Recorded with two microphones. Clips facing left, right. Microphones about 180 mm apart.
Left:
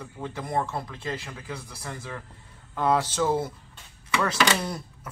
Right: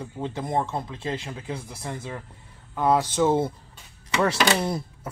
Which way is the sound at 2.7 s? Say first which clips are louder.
Right 2 dB; 10° right (ahead or behind).